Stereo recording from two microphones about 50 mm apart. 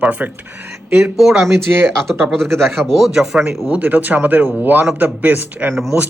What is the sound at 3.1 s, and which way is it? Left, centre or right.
Speech, centre.